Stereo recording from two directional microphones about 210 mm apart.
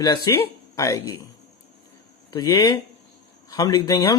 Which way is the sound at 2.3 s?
15° left (ahead or behind).